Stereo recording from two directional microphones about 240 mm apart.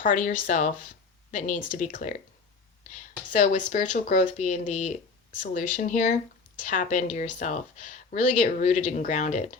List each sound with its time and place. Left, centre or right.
0.0 s speech: left